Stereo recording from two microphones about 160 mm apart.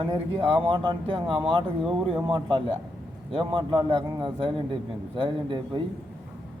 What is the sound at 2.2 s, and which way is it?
A man's voice, 35° right (ahead or behind).